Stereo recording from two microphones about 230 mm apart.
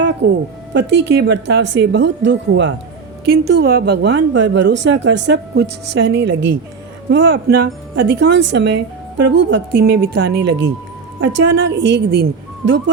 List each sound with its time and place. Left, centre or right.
0.2 s speech: right